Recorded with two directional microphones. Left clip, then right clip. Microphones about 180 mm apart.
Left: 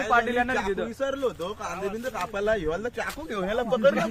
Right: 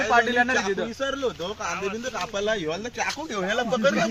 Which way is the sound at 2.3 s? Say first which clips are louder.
Left 1 dB; 10° right (ahead or behind).